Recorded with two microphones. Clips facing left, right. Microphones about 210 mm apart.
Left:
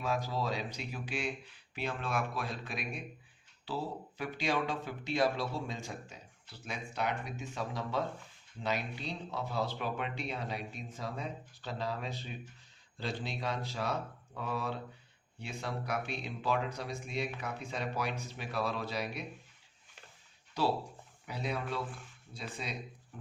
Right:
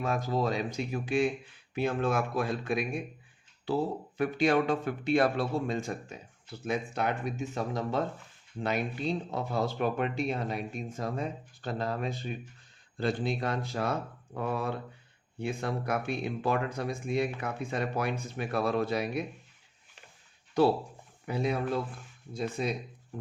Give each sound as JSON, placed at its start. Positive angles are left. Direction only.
{"t": 0.0, "sound": "speech", "side_deg": -50}
{"t": 4.2, "sound": "speech", "side_deg": -55}
{"t": 21.2, "sound": "speech", "side_deg": -50}